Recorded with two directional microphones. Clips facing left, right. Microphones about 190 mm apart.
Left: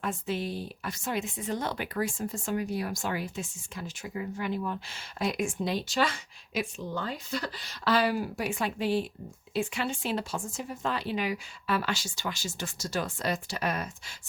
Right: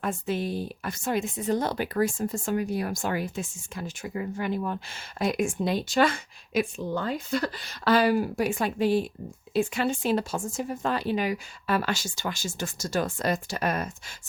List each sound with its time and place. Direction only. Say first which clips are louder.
0.0 s speech: right 3 dB; 50° right (ahead or behind)